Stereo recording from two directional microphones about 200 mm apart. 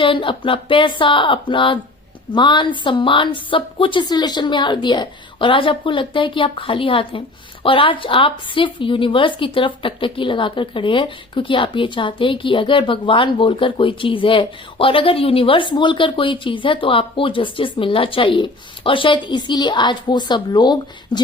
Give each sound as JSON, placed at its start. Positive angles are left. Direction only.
{"t": 0.0, "sound": "a woman's voice", "side_deg": 25}